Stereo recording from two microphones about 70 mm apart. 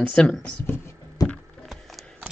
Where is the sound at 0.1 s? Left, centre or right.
Centre.